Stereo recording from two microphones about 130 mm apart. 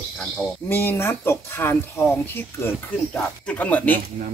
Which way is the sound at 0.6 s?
15° left (ahead or behind).